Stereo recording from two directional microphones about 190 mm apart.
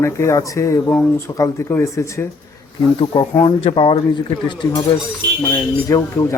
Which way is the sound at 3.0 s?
25° left (ahead or behind).